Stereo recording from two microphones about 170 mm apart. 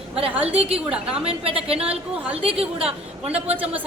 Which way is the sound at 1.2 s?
35° right (ahead or behind).